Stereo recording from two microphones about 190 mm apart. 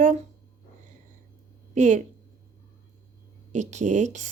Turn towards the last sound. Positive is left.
turn(degrees=-40)  # may be behind; listen again after turning